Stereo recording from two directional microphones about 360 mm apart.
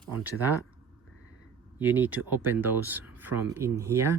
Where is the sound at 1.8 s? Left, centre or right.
Centre.